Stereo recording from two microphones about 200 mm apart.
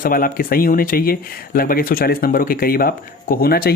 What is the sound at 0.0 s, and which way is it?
Speech, 45° left (ahead or behind).